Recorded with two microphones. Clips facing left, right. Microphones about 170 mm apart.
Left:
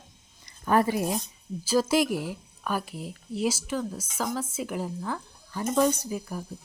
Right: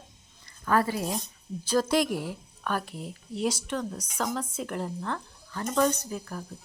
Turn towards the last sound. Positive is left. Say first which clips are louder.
# left 3 dB
turn(degrees=10)  # may be behind; listen again after turning